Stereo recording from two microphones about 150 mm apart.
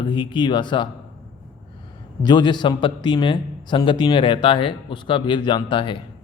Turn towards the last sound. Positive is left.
turn(degrees=35)  # may be behind; listen again after turning